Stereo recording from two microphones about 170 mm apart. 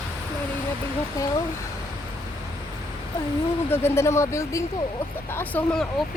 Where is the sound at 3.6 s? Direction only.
15° left (ahead or behind).